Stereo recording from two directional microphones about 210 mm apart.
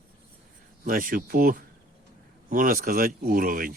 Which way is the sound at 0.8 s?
40° right (ahead or behind).